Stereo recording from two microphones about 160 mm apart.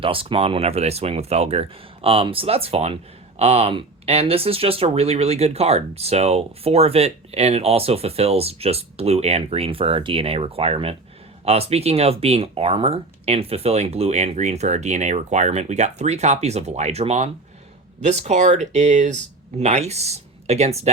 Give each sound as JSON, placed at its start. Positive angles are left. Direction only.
{"t": 0.0, "sound": "speech", "side_deg": -35}